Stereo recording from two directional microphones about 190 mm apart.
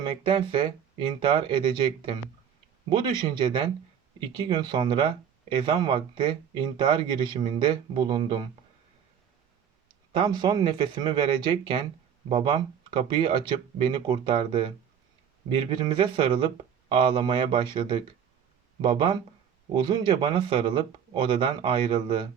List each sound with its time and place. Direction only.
0.0 s speech: 25° right (ahead or behind)
10.1 s speech: 25° right (ahead or behind)